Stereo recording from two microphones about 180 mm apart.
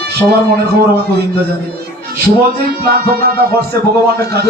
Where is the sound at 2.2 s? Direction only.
55° right (ahead or behind).